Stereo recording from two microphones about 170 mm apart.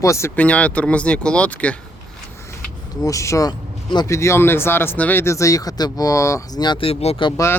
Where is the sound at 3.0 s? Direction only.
20° left (ahead or behind); by 7.3 s 35° left (ahead or behind).